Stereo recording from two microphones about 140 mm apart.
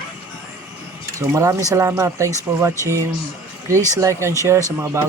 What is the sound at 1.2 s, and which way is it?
Speech, 20° right (ahead or behind).